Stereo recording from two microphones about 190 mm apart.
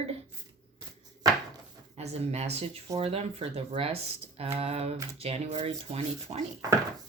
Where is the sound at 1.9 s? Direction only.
35° right (ahead or behind).